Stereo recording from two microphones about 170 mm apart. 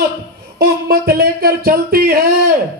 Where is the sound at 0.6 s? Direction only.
65° right (ahead or behind).